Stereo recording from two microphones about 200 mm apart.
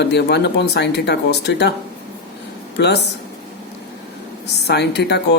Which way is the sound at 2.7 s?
55° left (ahead or behind).